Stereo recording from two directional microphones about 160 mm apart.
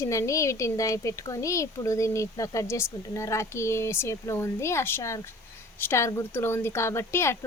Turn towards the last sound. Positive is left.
turn(degrees=15)  # may be behind; listen again after turning